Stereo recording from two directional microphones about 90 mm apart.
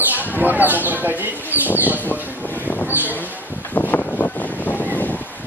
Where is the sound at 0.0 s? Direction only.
20° right (ahead or behind).